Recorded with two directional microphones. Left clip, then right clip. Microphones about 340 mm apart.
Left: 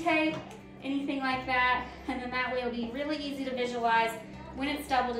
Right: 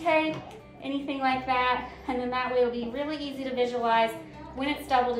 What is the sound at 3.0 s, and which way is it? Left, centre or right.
A woman's voice, centre.